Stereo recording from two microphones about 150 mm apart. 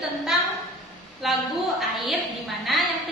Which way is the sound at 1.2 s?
Centre (ahead or behind).